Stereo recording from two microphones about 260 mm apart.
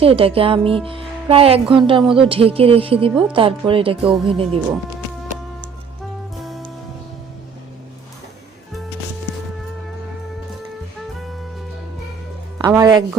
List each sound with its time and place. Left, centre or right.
0.0 s speech: right
6.3 s music: centre
12.5 s speech: centre